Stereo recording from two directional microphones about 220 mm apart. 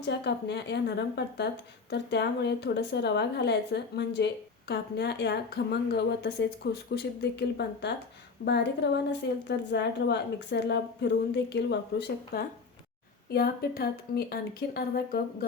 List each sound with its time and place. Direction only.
0.0 s a woman's voice: 50° left (ahead or behind)